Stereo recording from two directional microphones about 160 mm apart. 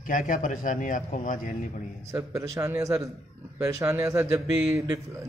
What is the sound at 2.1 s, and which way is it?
A man's voice, 20° right (ahead or behind).